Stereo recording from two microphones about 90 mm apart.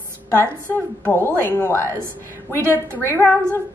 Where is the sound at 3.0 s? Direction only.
25° left (ahead or behind).